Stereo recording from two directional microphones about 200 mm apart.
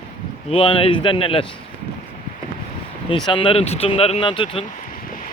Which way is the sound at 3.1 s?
25° left (ahead or behind).